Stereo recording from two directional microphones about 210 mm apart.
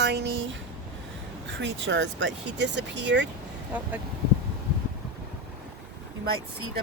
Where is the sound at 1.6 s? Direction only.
60° right (ahead or behind).